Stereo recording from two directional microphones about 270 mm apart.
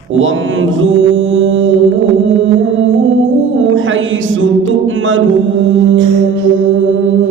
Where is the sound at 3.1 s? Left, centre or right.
Right.